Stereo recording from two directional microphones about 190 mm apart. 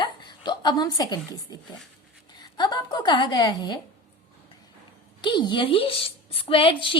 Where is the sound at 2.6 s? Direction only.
20° left (ahead or behind).